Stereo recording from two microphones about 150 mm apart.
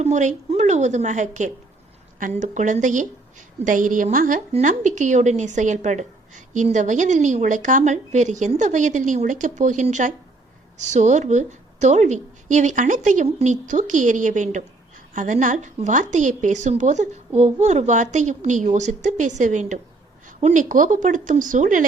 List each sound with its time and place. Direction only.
0.0 s a woman's voice: 55° right (ahead or behind)